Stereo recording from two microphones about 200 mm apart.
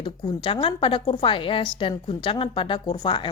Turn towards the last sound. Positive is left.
turn(degrees=25)  # may be behind; listen again after turning